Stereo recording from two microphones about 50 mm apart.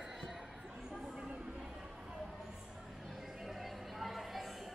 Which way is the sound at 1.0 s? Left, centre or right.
Centre.